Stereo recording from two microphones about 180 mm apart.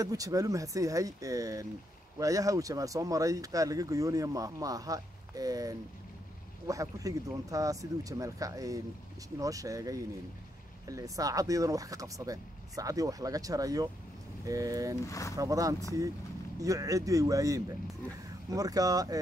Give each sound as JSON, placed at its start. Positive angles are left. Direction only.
{"t": 0.0, "sound": "speech", "side_deg": -20}
{"t": 15.0, "sound": "speech", "side_deg": 15}
{"t": 15.3, "sound": "speech", "side_deg": -20}